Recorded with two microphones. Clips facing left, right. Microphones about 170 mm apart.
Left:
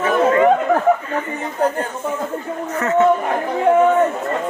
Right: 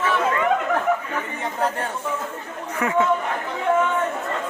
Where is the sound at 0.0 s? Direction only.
40° left (ahead or behind).